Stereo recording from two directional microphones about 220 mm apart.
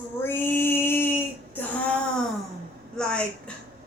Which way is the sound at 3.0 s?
5° left (ahead or behind).